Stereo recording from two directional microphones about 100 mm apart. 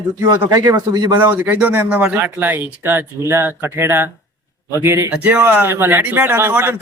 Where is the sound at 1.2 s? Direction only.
20° right (ahead or behind).